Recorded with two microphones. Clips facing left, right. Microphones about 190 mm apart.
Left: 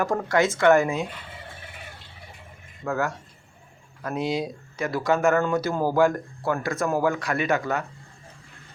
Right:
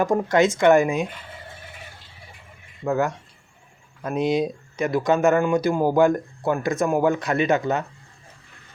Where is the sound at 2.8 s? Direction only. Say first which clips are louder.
Right 4 dB; 20° right (ahead or behind).